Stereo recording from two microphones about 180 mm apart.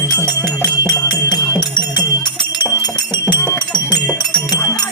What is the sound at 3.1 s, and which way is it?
Music, 25° left (ahead or behind).